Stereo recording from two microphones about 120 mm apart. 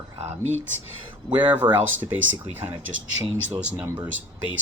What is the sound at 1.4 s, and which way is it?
Speech, 15° right (ahead or behind).